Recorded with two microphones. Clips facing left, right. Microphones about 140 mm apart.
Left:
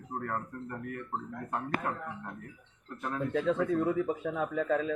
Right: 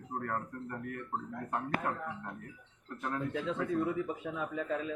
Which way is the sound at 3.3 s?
50° left (ahead or behind).